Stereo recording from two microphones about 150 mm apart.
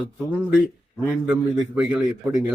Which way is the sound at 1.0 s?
10° right (ahead or behind).